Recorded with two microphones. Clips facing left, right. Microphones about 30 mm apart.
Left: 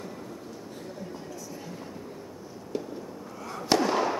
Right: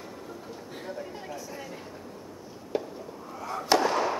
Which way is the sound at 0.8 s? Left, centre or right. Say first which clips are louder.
Right 4 dB; right.